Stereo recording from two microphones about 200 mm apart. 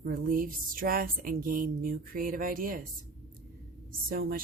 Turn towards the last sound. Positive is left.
turn(degrees=-45)  # may be behind; listen again after turning